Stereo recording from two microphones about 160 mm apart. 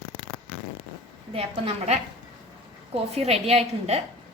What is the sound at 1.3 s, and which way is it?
Speech, 40° right (ahead or behind).